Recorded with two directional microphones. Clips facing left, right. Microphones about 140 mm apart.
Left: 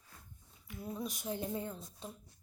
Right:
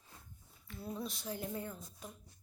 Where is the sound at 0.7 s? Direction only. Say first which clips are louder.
Left 1 dB; 15° left (ahead or behind).